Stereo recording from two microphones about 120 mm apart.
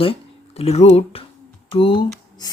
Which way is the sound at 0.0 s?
55° left (ahead or behind).